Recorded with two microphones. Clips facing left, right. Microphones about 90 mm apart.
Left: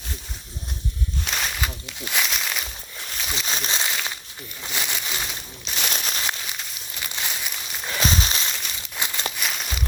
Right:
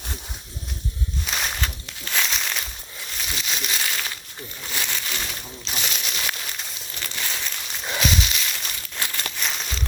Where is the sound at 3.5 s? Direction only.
30° left (ahead or behind).